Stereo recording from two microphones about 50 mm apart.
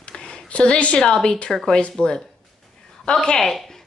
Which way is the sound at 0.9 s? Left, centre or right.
Centre.